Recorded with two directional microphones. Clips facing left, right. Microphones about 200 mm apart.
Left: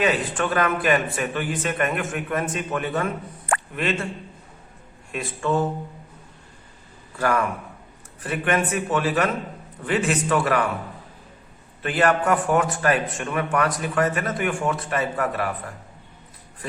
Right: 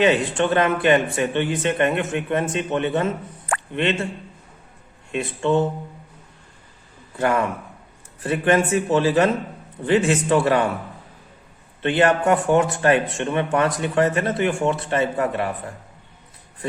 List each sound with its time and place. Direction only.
0.0 s speech: 25° right (ahead or behind)
5.1 s speech: 25° right (ahead or behind)
7.2 s speech: 25° right (ahead or behind)
11.8 s speech: 25° right (ahead or behind)